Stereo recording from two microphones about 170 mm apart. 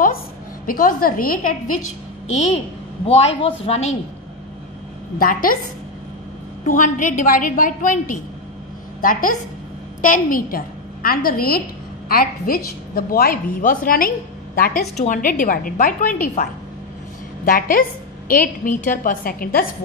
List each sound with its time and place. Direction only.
0.7 s a woman's voice: 55° left (ahead or behind)
2.3 s a woman's voice: 40° left (ahead or behind)
5.2 s a woman's voice: 55° left (ahead or behind)
6.6 s a woman's voice: 50° left (ahead or behind)
15.0 s a woman's voice: 50° left (ahead or behind)
17.5 s a woman's voice: 55° left (ahead or behind)